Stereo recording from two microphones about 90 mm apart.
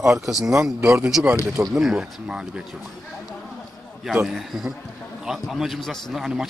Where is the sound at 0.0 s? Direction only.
5° right (ahead or behind).